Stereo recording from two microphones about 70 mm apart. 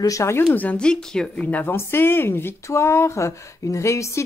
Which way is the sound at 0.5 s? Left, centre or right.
Left.